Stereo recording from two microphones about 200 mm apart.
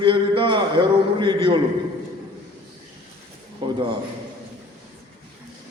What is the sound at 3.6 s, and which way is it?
Speech, 25° right (ahead or behind).